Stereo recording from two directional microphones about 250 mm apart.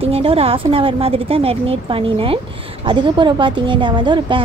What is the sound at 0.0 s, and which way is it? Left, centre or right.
A woman's voice, right.